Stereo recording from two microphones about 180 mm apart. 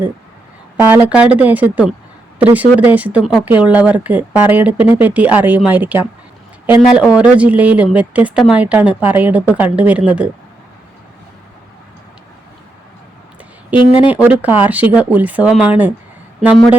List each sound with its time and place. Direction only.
0.9 s speech: 5° right (ahead or behind)
13.7 s speech: 30° left (ahead or behind)
14.1 s speech: 10° right (ahead or behind)